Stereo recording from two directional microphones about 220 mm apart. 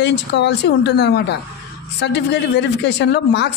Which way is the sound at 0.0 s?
50° left (ahead or behind).